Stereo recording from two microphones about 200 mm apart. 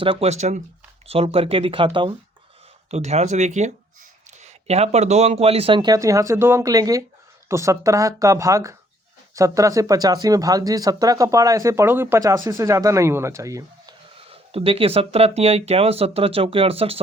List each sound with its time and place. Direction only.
0.0 s speech: 30° right (ahead or behind)
14.3 s speech: 30° right (ahead or behind)